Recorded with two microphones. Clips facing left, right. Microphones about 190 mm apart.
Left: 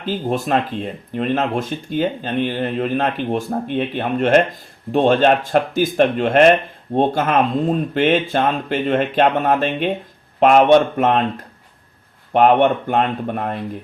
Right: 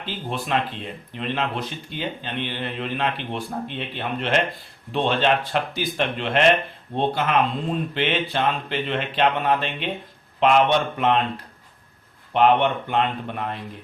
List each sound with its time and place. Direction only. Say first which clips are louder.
0.0 s speech: left 9 dB; 45° left (ahead or behind)
12.3 s speech: left 5 dB; 45° left (ahead or behind)